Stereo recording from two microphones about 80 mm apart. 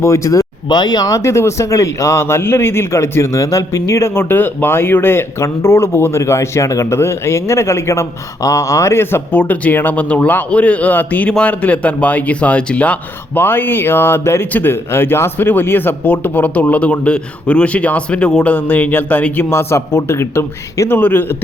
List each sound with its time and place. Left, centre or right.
0.0 s a man's voice: left
0.7 s speech: left
1.2 s a man's voice: left